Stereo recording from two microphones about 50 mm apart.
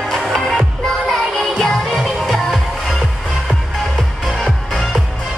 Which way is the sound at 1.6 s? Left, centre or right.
Centre.